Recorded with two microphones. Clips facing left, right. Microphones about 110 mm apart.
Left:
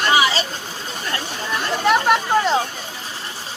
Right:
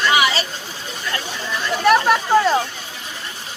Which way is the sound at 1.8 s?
20° left (ahead or behind).